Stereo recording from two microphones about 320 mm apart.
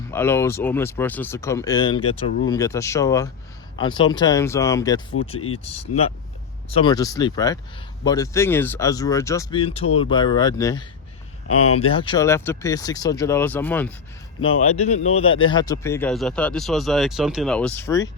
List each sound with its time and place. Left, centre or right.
0.1 s speech: centre
5.4 s speech: left
6.7 s speech: centre
11.4 s speech: left
11.9 s speech: centre
15.2 s speech: left
15.4 s speech: centre